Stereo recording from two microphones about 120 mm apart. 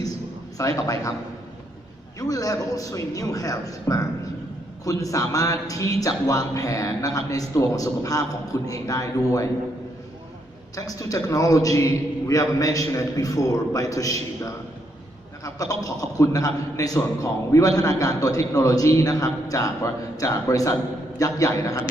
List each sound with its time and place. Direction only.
0.6 s speech: 25° left (ahead or behind)
2.1 s speech: 30° left (ahead or behind)
10.8 s speech: 30° left (ahead or behind)
15.4 s speech: 30° left (ahead or behind)